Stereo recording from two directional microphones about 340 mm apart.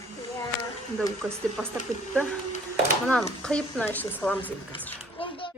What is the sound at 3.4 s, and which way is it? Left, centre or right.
Speech, centre.